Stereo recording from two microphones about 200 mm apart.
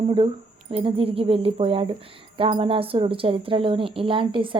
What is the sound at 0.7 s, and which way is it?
A woman's voice, 30° right (ahead or behind).